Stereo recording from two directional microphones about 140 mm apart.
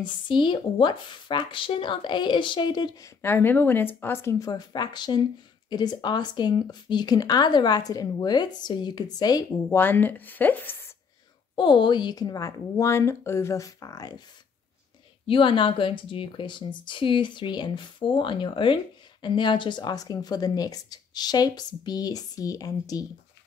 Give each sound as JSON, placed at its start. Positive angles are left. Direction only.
{"t": 0.0, "sound": "speech", "side_deg": 35}
{"t": 3.2, "sound": "a woman's voice", "side_deg": 15}
{"t": 9.5, "sound": "a woman's voice", "side_deg": 15}
{"t": 11.5, "sound": "speech", "side_deg": 35}
{"t": 15.2, "sound": "speech", "side_deg": 40}